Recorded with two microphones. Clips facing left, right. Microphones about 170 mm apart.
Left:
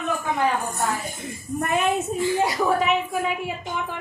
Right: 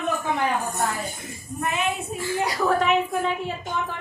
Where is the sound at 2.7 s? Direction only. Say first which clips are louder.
Right 1 dB; 5° left (ahead or behind).